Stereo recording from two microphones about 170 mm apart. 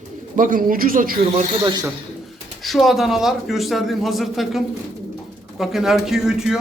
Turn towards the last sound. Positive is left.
turn(degrees=-5)  # may be behind; listen again after turning